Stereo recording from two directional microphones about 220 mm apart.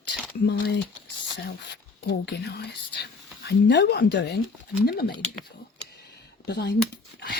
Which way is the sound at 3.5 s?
50° left (ahead or behind).